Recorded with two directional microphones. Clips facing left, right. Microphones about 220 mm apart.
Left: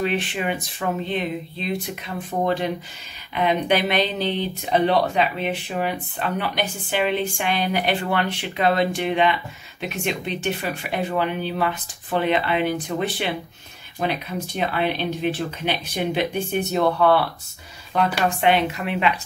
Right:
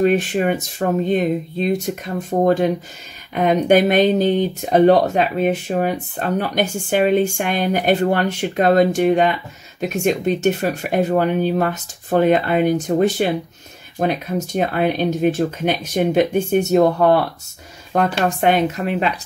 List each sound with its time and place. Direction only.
0.0 s speech: 45° right (ahead or behind)